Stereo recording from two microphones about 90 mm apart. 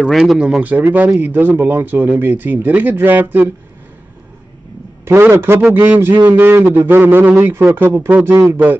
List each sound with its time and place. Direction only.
0.0 s speech: 5° right (ahead or behind)
0.6 s speech: 20° right (ahead or behind)
5.0 s speech: 30° right (ahead or behind)